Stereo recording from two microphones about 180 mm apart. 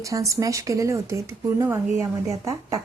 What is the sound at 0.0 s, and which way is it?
A woman's voice, 20° right (ahead or behind).